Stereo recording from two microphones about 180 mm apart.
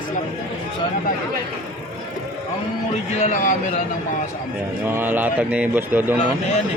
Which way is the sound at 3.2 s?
45° left (ahead or behind).